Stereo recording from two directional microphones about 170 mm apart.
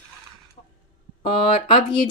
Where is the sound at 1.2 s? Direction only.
30° left (ahead or behind).